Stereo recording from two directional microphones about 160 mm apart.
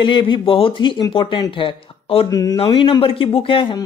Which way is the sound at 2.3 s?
25° left (ahead or behind).